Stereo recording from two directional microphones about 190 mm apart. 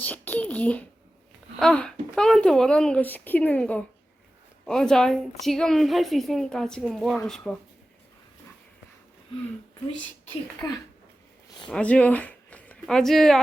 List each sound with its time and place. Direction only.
0.0 s a sound: 10° left (ahead or behind)
1.5 s speech: 5° left (ahead or behind)
10.6 s a child's voice: 20° left (ahead or behind)
11.7 s speech: 5° left (ahead or behind)